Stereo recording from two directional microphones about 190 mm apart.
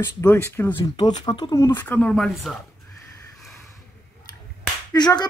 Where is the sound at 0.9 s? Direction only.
25° left (ahead or behind); by 2.6 s centre (ahead or behind).